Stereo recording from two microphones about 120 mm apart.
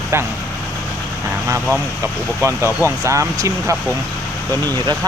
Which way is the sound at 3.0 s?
25° right (ahead or behind).